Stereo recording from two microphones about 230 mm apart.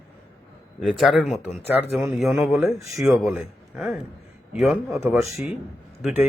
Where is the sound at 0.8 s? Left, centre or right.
Centre.